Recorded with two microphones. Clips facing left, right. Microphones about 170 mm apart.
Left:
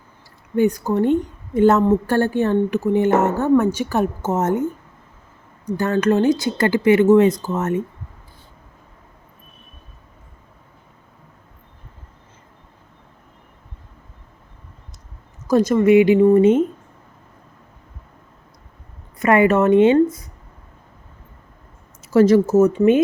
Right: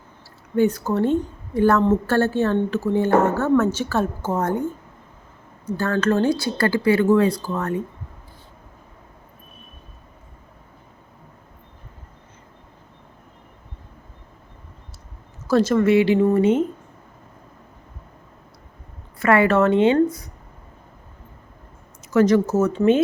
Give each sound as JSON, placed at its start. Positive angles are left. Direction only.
{"t": 0.5, "sound": "a woman's voice", "side_deg": 15}
{"t": 15.4, "sound": "a woman's voice", "side_deg": 15}
{"t": 19.2, "sound": "speech", "side_deg": 20}
{"t": 22.0, "sound": "speech", "side_deg": 25}